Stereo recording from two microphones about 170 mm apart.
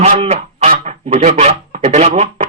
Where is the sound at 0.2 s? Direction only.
40° right (ahead or behind).